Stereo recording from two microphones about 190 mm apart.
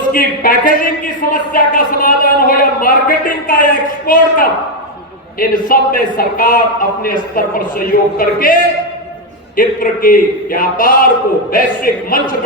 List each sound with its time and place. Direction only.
0.1 s a man's voice: 50° left (ahead or behind)
9.6 s a man's voice: 45° left (ahead or behind)